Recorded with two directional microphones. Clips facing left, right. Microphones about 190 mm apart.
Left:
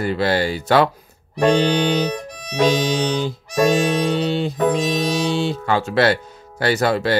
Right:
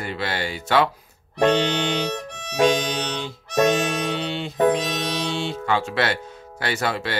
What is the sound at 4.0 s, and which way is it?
Music, 40° left (ahead or behind).